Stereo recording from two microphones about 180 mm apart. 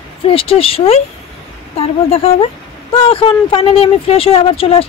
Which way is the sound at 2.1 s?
35° left (ahead or behind).